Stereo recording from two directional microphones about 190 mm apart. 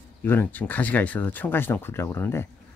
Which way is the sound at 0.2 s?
10° left (ahead or behind).